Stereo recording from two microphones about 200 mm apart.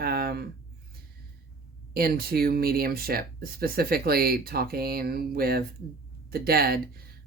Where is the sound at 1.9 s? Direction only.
50° right (ahead or behind).